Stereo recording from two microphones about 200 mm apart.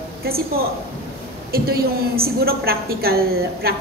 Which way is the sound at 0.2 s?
50° right (ahead or behind).